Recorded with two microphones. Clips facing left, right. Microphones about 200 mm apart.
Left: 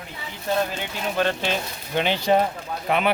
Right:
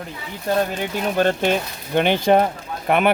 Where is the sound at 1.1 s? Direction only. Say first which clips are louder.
Right 5 dB; 45° right (ahead or behind).